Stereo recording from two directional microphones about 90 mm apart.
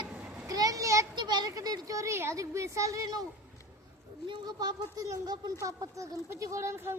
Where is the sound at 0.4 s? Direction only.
40° right (ahead or behind).